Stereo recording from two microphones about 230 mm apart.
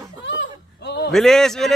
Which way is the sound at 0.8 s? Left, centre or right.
Left.